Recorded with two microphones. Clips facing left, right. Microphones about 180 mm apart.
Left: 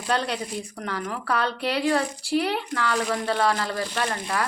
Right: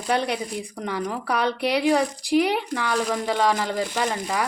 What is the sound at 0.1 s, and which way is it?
Speech, 15° right (ahead or behind).